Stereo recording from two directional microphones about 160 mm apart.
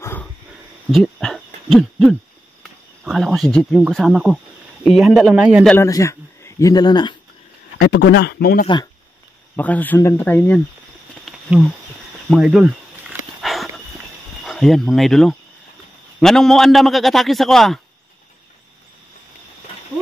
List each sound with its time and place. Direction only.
0.0 s a sound: 15° left (ahead or behind)
0.9 s hoot: centre (ahead or behind)
2.6 s a man's voice: centre (ahead or behind)
5.8 s a man's voice: 20° left (ahead or behind)
7.8 s speech: 90° left
9.6 s speech: 10° left (ahead or behind)
11.5 s a man's voice: 10° right (ahead or behind)
13.4 s dog: centre (ahead or behind)
14.4 s a man's voice: centre (ahead or behind)